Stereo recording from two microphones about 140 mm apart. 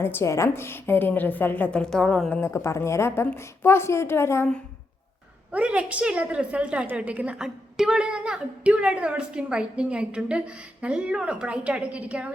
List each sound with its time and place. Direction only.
0.0 s a woman's voice: 15° left (ahead or behind)
2.4 s a woman's voice: 20° left (ahead or behind)
5.5 s a woman's voice: 10° right (ahead or behind)